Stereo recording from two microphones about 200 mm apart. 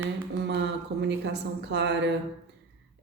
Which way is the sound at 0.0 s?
60° right (ahead or behind).